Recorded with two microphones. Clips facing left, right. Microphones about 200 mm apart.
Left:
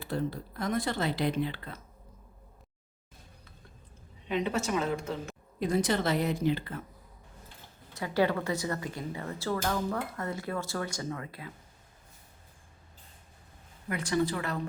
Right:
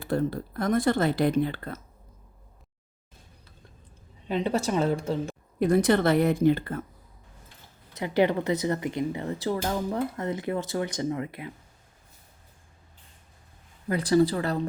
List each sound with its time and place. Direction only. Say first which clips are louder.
0.0 s speech: right 6 dB; 50° right (ahead or behind)
4.3 s speech: right 4 dB; 35° right (ahead or behind)
5.5 s a woman's voice: right 7 dB; 60° right (ahead or behind)
7.9 s speech: right 4 dB; 20° right (ahead or behind)
13.8 s speech: right 7 dB; 35° right (ahead or behind)